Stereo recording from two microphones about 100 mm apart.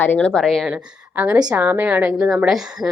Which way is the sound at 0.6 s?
15° right (ahead or behind).